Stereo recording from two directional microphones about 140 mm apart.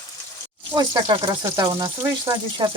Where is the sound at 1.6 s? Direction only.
25° right (ahead or behind).